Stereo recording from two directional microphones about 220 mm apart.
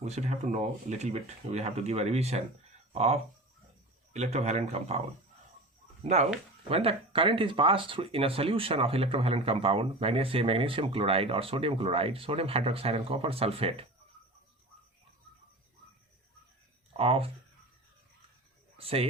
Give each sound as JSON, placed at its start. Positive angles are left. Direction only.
{"t": 0.0, "sound": "speech", "side_deg": -30}
{"t": 17.0, "sound": "speech", "side_deg": -25}
{"t": 18.8, "sound": "speech", "side_deg": -25}